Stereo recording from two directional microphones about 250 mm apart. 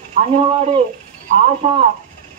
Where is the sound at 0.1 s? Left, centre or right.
Right.